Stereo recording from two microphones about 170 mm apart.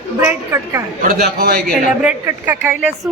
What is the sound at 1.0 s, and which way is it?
Speech, 55° right (ahead or behind).